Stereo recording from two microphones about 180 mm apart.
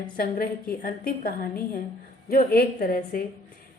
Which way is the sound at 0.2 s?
55° left (ahead or behind).